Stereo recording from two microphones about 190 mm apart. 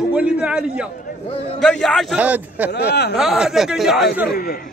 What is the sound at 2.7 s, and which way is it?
Speech, 60° left (ahead or behind).